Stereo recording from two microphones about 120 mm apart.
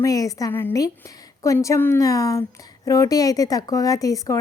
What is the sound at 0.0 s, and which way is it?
Speech, 30° left (ahead or behind).